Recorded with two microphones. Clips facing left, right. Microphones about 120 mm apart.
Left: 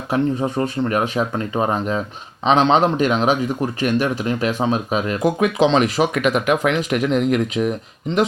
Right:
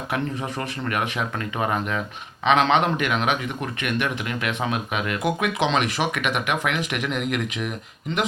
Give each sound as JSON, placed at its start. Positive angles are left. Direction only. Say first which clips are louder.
{"t": 0.1, "sound": "speech", "louder": "left 9 dB", "side_deg": 30}